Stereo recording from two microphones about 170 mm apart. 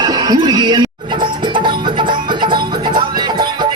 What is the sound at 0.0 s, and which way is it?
Music, 25° right (ahead or behind).